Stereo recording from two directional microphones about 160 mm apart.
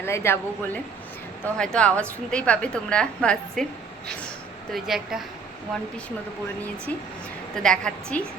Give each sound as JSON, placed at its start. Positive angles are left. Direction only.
{"t": 0.0, "sound": "a woman's voice", "side_deg": 15}
{"t": 1.5, "sound": "a woman's voice", "side_deg": 5}
{"t": 4.7, "sound": "a woman's voice", "side_deg": 0}
{"t": 7.5, "sound": "a woman's voice", "side_deg": 5}